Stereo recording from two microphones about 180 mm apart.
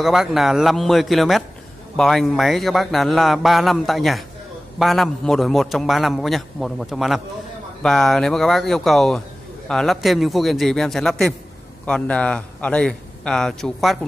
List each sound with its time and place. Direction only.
0.0 s a man's voice: centre (ahead or behind)